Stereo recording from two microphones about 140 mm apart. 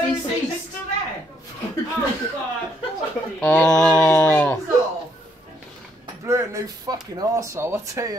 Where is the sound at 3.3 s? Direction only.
10° left (ahead or behind).